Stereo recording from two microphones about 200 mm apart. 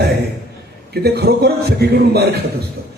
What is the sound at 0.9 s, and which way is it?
A man's voice, 55° right (ahead or behind).